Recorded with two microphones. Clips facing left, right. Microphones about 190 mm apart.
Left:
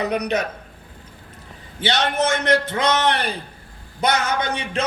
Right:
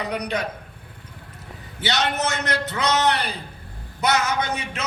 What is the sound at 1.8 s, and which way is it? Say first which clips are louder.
Speech: left 3 dB; 30° left (ahead or behind).